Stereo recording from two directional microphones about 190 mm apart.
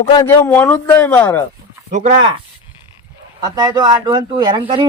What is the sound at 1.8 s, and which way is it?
Speech, 40° right (ahead or behind).